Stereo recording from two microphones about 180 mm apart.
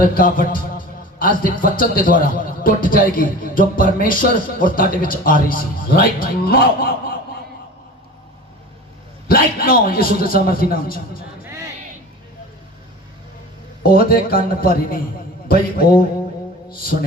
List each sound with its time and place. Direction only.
0.1 s a man's voice: 50° left (ahead or behind)
9.2 s a man's voice: 55° left (ahead or behind)
13.8 s a man's voice: 55° left (ahead or behind)